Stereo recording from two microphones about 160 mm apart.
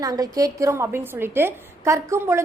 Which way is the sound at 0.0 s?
20° right (ahead or behind).